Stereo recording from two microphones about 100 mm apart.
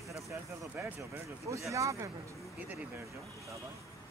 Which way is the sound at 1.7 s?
35° right (ahead or behind).